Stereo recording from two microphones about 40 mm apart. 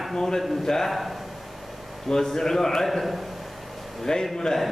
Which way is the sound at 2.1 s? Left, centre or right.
Centre.